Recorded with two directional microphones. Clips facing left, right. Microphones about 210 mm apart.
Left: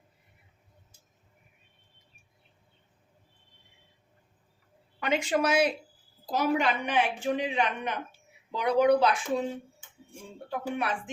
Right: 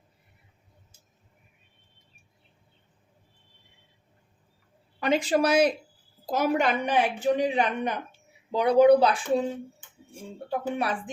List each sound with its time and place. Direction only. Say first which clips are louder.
4.9 s a woman's voice: right 4 dB; 35° right (ahead or behind)
10.5 s a woman's voice: right 3 dB; 35° right (ahead or behind)